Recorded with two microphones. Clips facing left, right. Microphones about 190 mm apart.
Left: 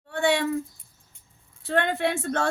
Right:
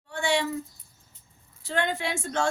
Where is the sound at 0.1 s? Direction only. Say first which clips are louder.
Left 3 dB; 60° left (ahead or behind).